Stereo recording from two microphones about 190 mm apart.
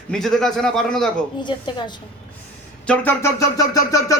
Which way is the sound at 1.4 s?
25° left (ahead or behind).